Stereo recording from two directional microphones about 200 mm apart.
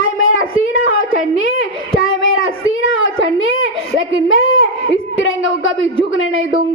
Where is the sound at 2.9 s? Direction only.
80° left.